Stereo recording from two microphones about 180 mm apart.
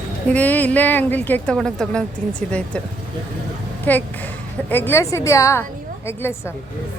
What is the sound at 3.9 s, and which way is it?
Speech, 10° left (ahead or behind).